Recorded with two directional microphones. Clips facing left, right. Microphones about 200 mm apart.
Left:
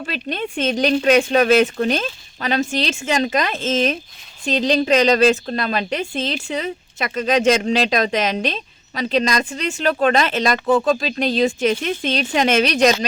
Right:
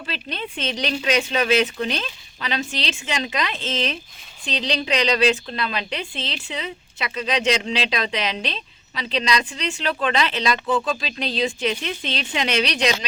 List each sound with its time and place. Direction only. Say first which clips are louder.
0.0 s a woman's voice: left 6 dB; 45° left (ahead or behind)